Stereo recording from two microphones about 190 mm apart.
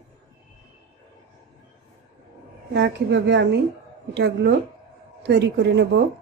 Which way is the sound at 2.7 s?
70° right (ahead or behind).